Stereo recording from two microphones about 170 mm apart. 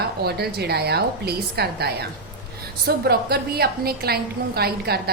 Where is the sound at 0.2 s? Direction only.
70° right (ahead or behind).